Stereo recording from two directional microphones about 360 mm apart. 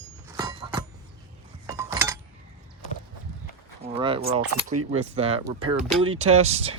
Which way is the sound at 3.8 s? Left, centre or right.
Centre.